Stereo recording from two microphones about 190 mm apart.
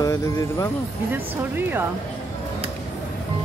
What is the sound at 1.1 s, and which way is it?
Speech, 10° right (ahead or behind).